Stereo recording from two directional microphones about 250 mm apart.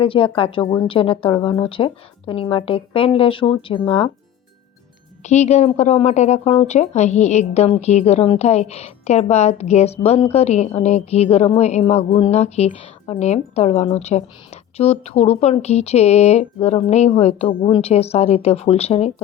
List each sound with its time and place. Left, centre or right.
0.0 s speech: left
5.2 s speech: left